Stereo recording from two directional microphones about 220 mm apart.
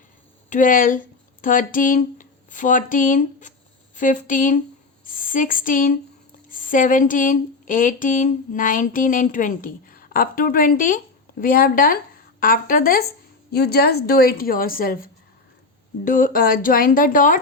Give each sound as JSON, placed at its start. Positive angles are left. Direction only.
{"t": 0.5, "sound": "a woman's voice", "side_deg": 35}